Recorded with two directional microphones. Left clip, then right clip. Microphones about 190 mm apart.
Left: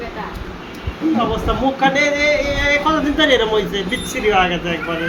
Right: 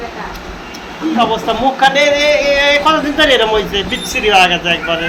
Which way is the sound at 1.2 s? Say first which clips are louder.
Right 9 dB; 20° left (ahead or behind).